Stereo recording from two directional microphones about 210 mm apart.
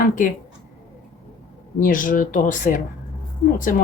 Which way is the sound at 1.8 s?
40° left (ahead or behind).